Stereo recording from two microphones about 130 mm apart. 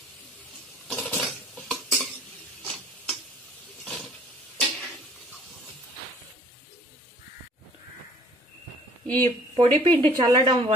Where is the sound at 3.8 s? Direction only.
Centre (ahead or behind).